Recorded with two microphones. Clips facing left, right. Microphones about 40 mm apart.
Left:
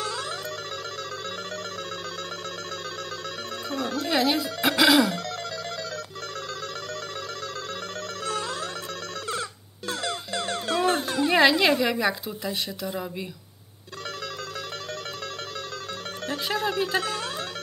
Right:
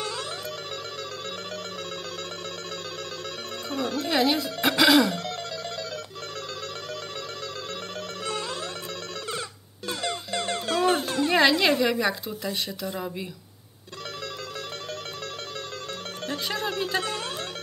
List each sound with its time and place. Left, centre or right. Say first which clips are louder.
3.7 s speech: even; centre
8.3 s music: left 2 dB; centre
10.7 s a woman's voice: right 1 dB; centre
16.3 s speech: left 2 dB; centre